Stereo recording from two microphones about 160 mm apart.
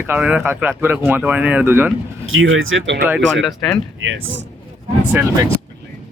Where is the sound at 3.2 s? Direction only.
Centre (ahead or behind).